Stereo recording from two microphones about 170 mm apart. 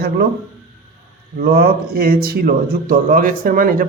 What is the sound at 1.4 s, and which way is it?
Speech, 60° right (ahead or behind).